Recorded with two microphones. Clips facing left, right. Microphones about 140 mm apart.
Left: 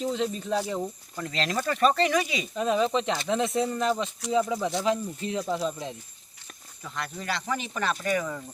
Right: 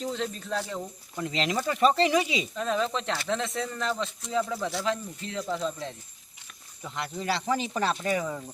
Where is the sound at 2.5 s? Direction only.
10° left (ahead or behind).